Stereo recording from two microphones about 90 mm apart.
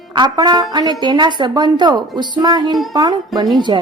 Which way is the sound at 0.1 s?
55° right (ahead or behind).